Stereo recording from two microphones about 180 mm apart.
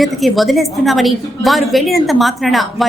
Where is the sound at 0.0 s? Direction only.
Centre (ahead or behind).